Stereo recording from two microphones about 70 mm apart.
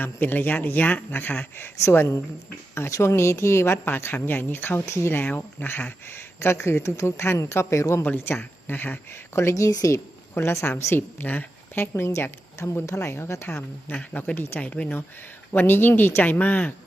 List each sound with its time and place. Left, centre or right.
0.0 s a man's voice: left
8.0 s a woman's voice: left
10.3 s a woman's voice: left
11.9 s a woman's voice: left
14.6 s a man's voice: centre
15.5 s a man's voice: left